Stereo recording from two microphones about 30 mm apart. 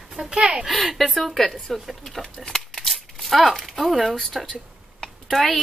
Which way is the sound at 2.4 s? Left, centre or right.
Centre.